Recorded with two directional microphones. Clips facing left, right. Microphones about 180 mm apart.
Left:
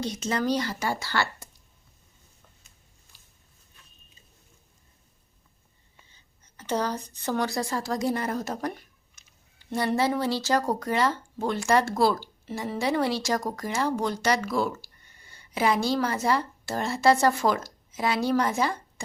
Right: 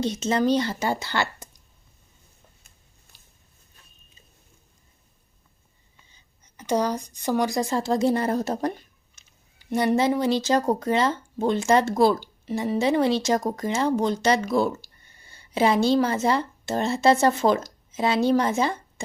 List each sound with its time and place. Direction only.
0.0 s speech: 25° right (ahead or behind)
6.1 s speech: 15° right (ahead or behind)
9.6 s speech: 15° right (ahead or behind)